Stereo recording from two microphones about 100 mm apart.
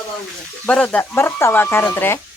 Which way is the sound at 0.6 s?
10° left (ahead or behind).